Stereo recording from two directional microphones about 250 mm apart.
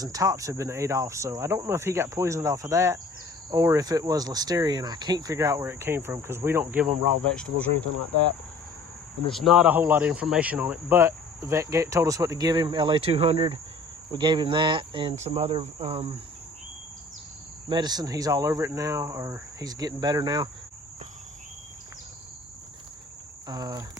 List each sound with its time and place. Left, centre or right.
0.0 s speech: centre
6.9 s speech: right
7.3 s speech: centre
9.3 s speech: centre; by 16.1 s right
17.7 s speech: centre
23.5 s speech: centre